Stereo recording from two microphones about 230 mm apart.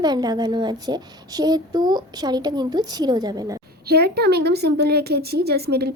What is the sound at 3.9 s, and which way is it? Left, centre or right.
A woman's voice, right.